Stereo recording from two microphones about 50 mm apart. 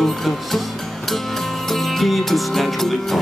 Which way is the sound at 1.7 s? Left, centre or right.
Centre.